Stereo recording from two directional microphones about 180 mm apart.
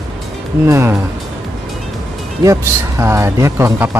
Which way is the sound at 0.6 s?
15° right (ahead or behind).